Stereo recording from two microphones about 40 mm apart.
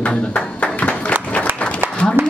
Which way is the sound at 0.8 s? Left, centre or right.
Left.